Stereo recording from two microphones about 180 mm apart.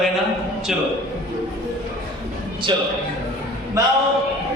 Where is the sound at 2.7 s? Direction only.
25° right (ahead or behind).